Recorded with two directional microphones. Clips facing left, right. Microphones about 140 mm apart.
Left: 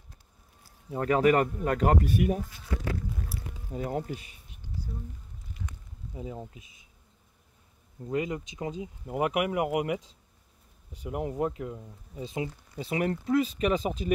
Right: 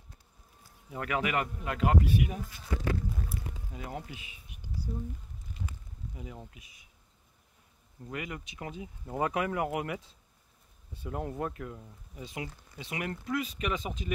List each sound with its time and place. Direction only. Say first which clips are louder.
0.8 s speech: left 9 dB; 35° left (ahead or behind)
3.7 s speech: left 10 dB; 40° left (ahead or behind)
4.5 s a sound: even; 10° right (ahead or behind)
6.1 s speech: left 8 dB; 25° left (ahead or behind)
8.0 s speech: left 9 dB; 25° left (ahead or behind)
12.7 s speech: left 8 dB; 40° left (ahead or behind)